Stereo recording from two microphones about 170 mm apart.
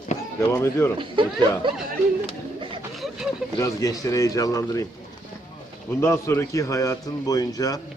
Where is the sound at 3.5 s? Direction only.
20° left (ahead or behind).